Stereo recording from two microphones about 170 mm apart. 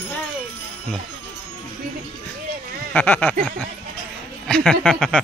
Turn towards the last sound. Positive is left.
turn(degrees=5)  # may be behind; listen again after turning